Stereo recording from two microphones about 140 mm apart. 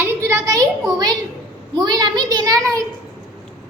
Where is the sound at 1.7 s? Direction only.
30° right (ahead or behind).